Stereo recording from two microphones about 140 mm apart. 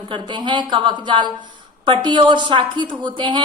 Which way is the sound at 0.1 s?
35° right (ahead or behind).